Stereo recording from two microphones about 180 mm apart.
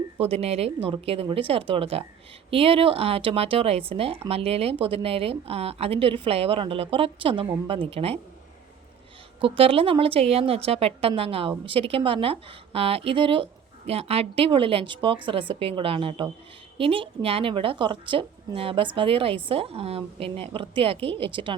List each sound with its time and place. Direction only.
0.2 s a woman's voice: 35° right (ahead or behind)
9.4 s a woman's voice: 30° right (ahead or behind)